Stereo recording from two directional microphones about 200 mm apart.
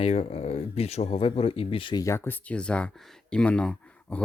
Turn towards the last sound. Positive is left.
turn(degrees=5)  # may be behind; listen again after turning